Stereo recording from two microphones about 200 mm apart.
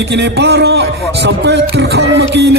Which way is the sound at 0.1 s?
60° right (ahead or behind).